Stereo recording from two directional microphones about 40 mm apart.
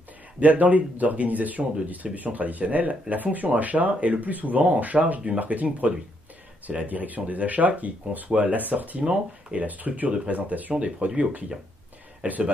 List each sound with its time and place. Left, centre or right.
0.4 s speech: right
9.0 s speech: right
9.6 s speech: right
12.2 s speech: right